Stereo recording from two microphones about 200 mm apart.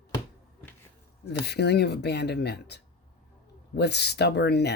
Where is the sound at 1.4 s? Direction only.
55° left (ahead or behind).